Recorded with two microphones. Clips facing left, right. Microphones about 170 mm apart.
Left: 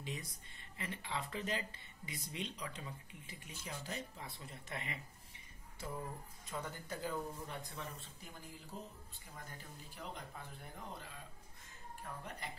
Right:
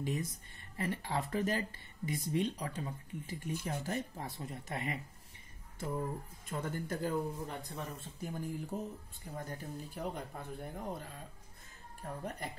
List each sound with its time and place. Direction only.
0.0 s speech: 45° right (ahead or behind)
6.5 s speech: 50° right (ahead or behind)